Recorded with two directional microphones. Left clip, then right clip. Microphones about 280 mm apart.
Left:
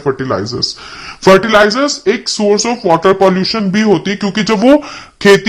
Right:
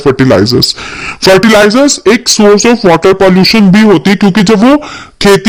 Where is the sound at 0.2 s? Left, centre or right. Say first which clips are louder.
Right 10 dB; right.